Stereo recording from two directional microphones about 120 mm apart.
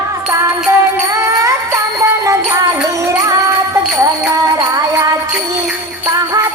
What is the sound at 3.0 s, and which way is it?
Music, 25° right (ahead or behind).